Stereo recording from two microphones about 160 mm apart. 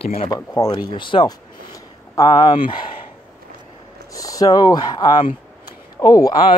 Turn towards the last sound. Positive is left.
turn(degrees=25)  # may be behind; listen again after turning